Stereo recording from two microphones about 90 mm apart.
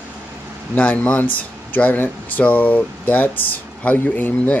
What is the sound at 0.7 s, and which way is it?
Speech, 15° left (ahead or behind).